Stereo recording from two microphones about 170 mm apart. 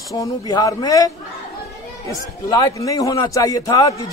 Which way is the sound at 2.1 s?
20° left (ahead or behind).